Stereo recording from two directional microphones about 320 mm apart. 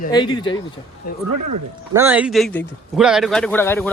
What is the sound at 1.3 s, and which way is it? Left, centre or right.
Speech, right.